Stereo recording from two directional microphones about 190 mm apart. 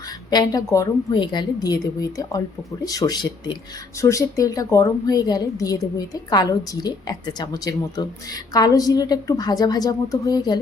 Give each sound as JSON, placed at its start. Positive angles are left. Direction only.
{"t": 0.3, "sound": "a woman's voice", "side_deg": 20}